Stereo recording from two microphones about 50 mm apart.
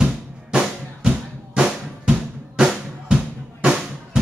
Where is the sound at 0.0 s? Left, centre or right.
Centre.